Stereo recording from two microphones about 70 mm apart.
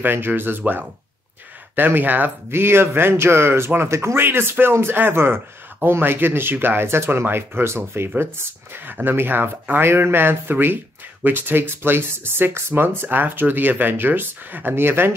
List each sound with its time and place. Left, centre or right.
0.0 s a man's voice: right